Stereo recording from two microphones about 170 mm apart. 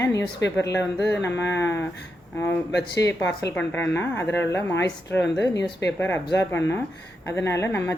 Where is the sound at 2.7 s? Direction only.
85° left.